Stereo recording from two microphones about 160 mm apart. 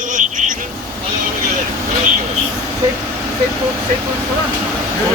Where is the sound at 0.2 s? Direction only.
50° right (ahead or behind).